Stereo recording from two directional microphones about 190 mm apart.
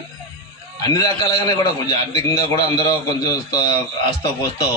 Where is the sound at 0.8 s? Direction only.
20° left (ahead or behind).